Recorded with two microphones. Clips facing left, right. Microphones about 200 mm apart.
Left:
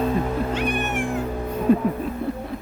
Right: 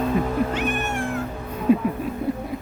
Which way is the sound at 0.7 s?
15° left (ahead or behind).